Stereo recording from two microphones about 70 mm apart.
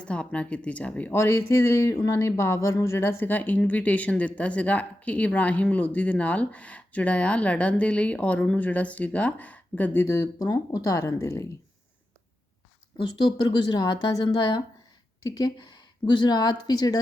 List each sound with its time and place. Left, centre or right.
0.0 s speech: centre
1.1 s speech: left
10.1 s speech: left
13.2 s speech: left
15.2 s speech: left
16.0 s speech: left